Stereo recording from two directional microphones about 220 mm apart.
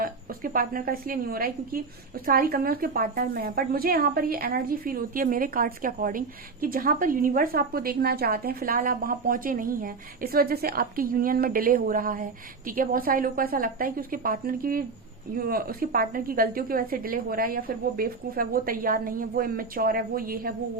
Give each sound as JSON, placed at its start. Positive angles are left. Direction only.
{"t": 0.0, "sound": "a woman's voice", "side_deg": -40}